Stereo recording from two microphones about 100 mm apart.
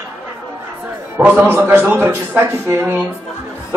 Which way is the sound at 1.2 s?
15° right (ahead or behind).